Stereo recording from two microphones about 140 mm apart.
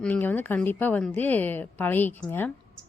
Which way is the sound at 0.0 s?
10° left (ahead or behind).